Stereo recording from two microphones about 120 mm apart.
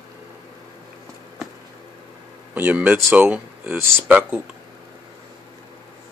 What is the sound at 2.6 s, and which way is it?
Speech, 15° right (ahead or behind).